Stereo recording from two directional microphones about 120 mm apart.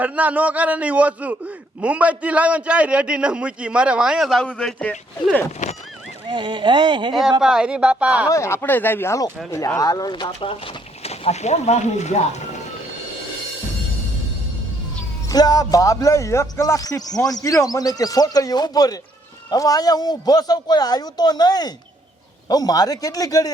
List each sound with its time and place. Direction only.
0.0 s a man's voice: 15° right (ahead or behind); by 5.5 s 10° left (ahead or behind)
6.2 s speech: 40° right (ahead or behind)
7.4 s a man's voice: 5° right (ahead or behind)
8.3 s speech: 25° left (ahead or behind); by 12.4 s 70° left (ahead or behind)
15.3 s speech: 30° left (ahead or behind)